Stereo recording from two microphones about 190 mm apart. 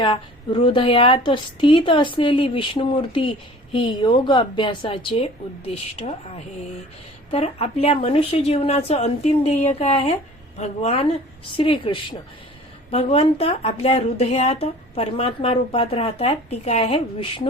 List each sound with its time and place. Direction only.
0.0 s a woman's voice: 25° left (ahead or behind)